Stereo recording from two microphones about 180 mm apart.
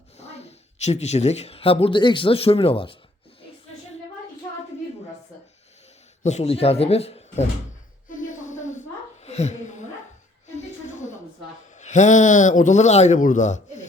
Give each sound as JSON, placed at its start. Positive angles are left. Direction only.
{"t": 0.2, "sound": "a woman's voice", "side_deg": 35}
{"t": 6.2, "sound": "speech", "side_deg": 35}
{"t": 8.1, "sound": "a sound", "side_deg": 45}
{"t": 11.7, "sound": "a man's voice", "side_deg": 40}